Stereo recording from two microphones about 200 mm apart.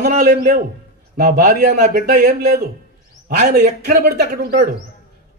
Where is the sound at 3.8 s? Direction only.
50° right (ahead or behind).